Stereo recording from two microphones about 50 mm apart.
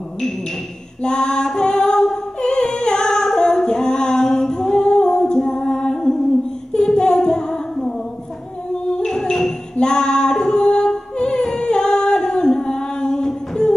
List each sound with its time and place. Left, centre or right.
1.0 s music: centre
6.7 s child singing: centre
8.9 s female singing: centre